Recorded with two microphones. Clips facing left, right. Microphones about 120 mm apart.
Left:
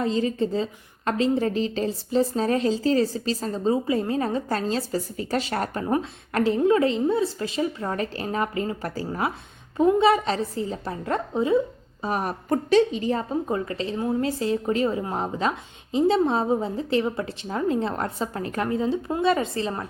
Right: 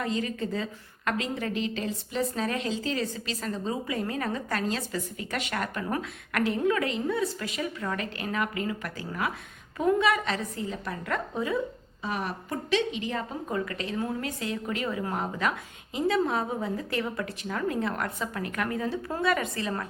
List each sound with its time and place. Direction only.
0.0 s a woman's voice: 30° left (ahead or behind)
12.0 s a woman's voice: 40° left (ahead or behind); by 19.9 s 25° left (ahead or behind)